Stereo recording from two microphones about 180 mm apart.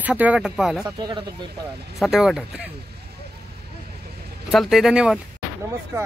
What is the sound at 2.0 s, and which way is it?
Speech, centre (ahead or behind).